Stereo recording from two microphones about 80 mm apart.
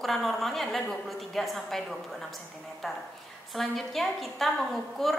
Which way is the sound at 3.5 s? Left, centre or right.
Centre.